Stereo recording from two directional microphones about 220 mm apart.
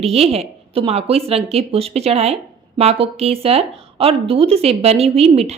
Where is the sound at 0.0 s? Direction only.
25° right (ahead or behind).